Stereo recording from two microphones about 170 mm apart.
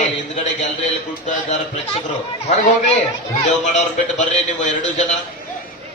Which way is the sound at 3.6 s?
45° left (ahead or behind).